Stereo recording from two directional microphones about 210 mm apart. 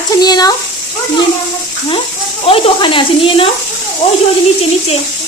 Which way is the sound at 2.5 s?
25° left (ahead or behind).